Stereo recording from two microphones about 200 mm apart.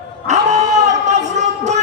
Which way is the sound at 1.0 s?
35° right (ahead or behind).